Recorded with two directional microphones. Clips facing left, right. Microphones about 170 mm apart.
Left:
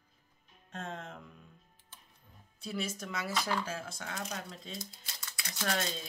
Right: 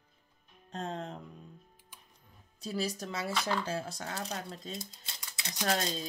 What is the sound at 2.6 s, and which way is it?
Speech, 35° right (ahead or behind).